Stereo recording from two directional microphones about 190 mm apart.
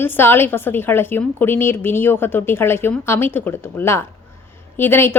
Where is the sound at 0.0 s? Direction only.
10° left (ahead or behind).